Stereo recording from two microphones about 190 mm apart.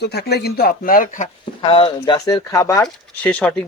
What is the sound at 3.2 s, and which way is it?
Speech, 5° left (ahead or behind).